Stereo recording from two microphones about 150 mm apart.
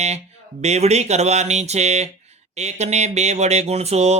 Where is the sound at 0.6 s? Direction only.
45° right (ahead or behind).